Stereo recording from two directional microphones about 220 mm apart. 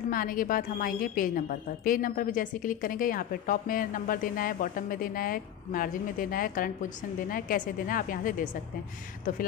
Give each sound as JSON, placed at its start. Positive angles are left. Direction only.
{"t": 0.1, "sound": "a woman's voice", "side_deg": 40}